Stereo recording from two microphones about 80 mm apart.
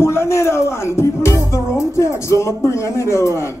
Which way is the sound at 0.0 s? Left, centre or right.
Left.